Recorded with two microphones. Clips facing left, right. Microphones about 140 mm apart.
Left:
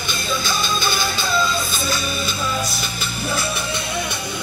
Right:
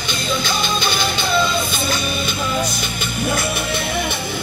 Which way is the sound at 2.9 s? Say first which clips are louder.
Right 4 dB; 35° left (ahead or behind).